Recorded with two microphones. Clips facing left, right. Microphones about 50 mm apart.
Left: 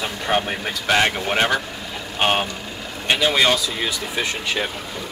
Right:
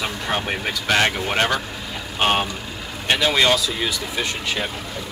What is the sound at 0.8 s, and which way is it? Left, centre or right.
Speech, centre.